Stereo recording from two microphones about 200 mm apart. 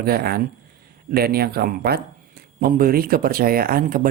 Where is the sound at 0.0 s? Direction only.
50° right (ahead or behind).